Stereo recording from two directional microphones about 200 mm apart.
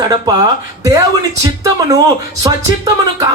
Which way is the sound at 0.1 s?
20° right (ahead or behind).